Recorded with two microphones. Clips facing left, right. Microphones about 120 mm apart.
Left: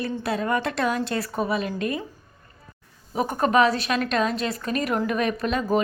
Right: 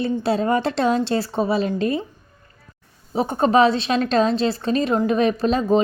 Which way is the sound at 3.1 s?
30° right (ahead or behind).